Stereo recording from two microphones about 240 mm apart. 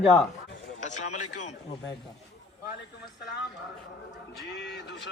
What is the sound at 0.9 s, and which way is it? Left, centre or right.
Speech, left.